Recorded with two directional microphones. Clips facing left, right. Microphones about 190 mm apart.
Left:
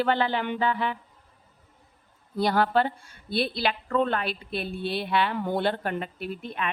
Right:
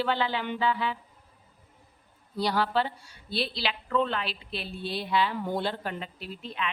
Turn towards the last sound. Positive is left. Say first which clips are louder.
# left 4 dB
turn(degrees=55)  # may be behind; listen again after turning